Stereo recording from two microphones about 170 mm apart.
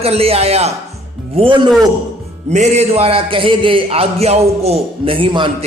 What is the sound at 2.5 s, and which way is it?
Speech, 40° right (ahead or behind).